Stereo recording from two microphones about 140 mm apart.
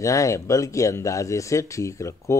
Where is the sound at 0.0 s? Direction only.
20° left (ahead or behind).